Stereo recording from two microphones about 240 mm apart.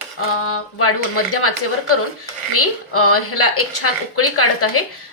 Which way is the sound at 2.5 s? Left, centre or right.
Left.